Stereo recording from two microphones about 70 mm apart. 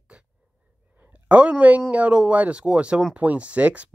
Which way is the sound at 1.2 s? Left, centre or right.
Centre.